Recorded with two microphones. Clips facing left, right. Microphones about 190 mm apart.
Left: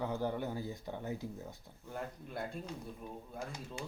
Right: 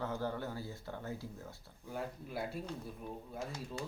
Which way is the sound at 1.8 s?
Centre (ahead or behind).